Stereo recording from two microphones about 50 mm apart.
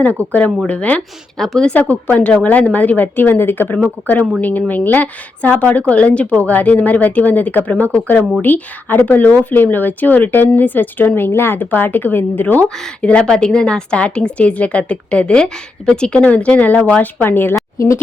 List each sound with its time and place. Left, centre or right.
0.1 s speech: right
0.7 s a woman's voice: left
1.4 s speech: centre
1.7 s a woman's voice: left
4.0 s a woman's voice: left
13.0 s a woman's voice: left
17.2 s a woman's voice: left
17.5 s a woman's voice: left